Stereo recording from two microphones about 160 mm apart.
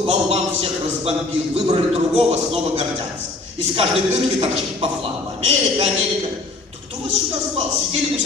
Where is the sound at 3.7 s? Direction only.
35° right (ahead or behind).